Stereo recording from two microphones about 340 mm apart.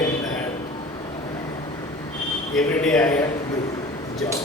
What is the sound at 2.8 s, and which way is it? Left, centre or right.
Speech, centre.